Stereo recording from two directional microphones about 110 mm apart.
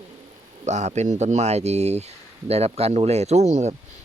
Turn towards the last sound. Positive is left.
turn(degrees=-90)